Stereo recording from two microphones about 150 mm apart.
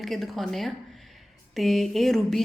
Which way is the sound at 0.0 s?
Centre (ahead or behind).